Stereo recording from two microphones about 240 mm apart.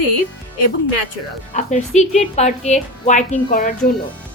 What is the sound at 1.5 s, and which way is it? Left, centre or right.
A woman's voice, left.